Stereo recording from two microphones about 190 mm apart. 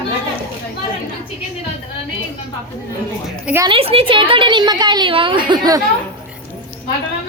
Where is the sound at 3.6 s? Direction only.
30° right (ahead or behind).